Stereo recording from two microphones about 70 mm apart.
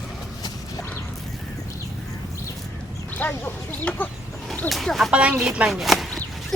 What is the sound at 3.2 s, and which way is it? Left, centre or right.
Speech, left.